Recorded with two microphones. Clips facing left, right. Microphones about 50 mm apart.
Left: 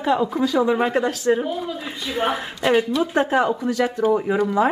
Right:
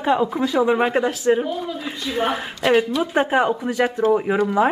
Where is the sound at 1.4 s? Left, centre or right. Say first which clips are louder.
Even; centre.